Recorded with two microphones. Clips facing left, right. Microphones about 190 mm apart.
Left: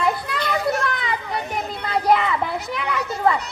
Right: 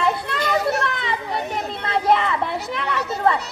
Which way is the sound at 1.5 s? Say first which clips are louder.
Even; centre (ahead or behind).